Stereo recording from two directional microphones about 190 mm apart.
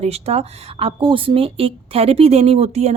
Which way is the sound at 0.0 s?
30° right (ahead or behind).